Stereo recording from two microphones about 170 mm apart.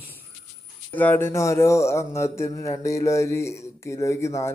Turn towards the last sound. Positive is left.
turn(degrees=15)  # may be behind; listen again after turning